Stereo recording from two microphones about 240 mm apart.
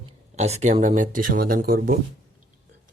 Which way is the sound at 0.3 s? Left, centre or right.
Right.